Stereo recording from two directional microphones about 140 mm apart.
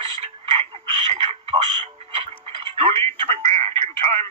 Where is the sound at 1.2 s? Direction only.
45° right (ahead or behind).